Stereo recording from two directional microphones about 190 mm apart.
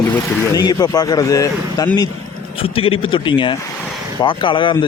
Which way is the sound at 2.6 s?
30° left (ahead or behind).